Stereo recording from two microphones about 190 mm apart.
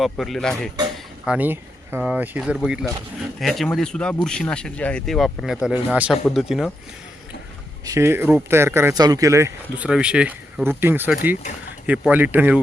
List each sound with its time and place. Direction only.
0.0 s speech: centre (ahead or behind)
7.9 s speech: 15° right (ahead or behind)